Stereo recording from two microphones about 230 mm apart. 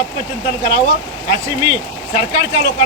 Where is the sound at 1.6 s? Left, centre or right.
Centre.